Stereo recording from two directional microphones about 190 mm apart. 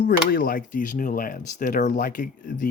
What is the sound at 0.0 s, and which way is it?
Speech, 50° left (ahead or behind).